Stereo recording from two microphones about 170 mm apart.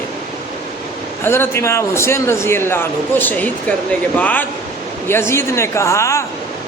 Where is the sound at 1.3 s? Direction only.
15° left (ahead or behind).